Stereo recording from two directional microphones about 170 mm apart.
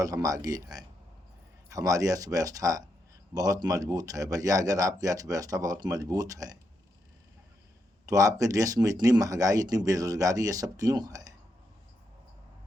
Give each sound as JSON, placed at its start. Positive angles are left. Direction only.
{"t": 0.0, "sound": "speech", "side_deg": -20}
{"t": 8.0, "sound": "speech", "side_deg": -20}